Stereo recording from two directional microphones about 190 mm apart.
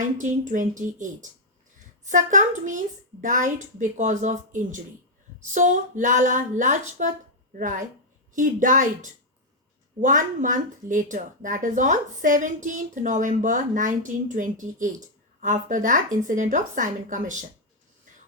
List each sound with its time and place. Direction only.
0.0 s a woman's voice: 40° right (ahead or behind)